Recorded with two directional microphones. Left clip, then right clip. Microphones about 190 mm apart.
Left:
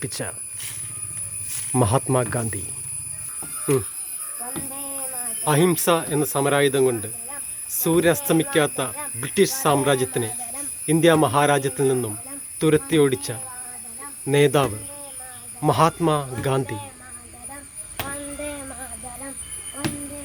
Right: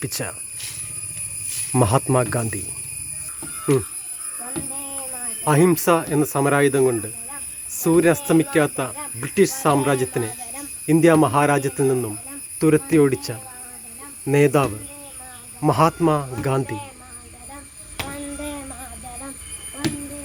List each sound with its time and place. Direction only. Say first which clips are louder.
0.0 s speech: right 2 dB; centre (ahead or behind)
1.7 s speech: right 2 dB; centre (ahead or behind)
4.7 s speech: even; centre (ahead or behind)
17.9 s a sound: right 1 dB; 15° left (ahead or behind)